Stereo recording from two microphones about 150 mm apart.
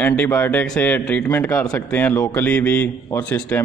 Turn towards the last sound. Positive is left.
turn(degrees=10)  # may be behind; listen again after turning